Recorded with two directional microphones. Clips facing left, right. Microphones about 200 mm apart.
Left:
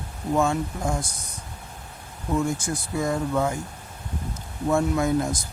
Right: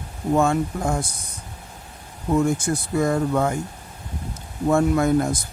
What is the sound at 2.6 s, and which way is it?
Speech, 55° right (ahead or behind).